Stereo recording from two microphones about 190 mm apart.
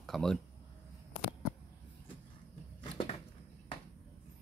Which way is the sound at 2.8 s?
25° left (ahead or behind).